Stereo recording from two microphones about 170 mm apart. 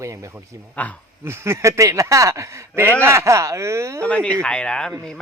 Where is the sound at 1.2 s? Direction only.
15° right (ahead or behind).